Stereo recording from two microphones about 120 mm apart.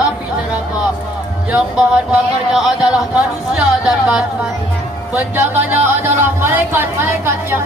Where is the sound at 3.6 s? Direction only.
10° right (ahead or behind).